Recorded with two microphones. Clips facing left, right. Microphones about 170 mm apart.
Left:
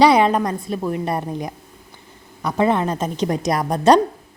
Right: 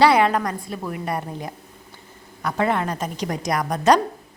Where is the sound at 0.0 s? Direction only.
20° left (ahead or behind).